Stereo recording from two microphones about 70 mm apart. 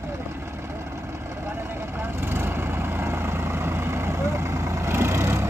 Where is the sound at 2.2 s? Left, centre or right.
Right.